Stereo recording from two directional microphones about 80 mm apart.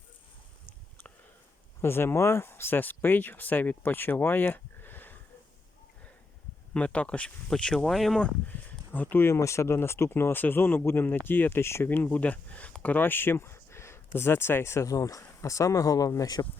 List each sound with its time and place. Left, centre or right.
1.8 s speech: left
6.7 s speech: centre
8.9 s speech: left